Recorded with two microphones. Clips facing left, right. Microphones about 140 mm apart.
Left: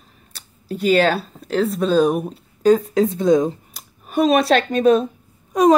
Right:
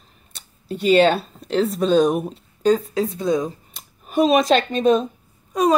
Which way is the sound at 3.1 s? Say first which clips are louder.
Left 6 dB; 25° left (ahead or behind).